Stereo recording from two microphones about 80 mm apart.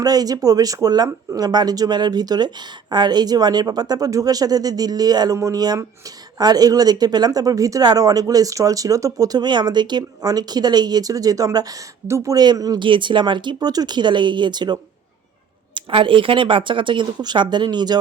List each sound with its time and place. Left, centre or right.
0.0 s speech: right
12.0 s speech: right
12.3 s speech: right
12.8 s speech: right
15.7 s speech: right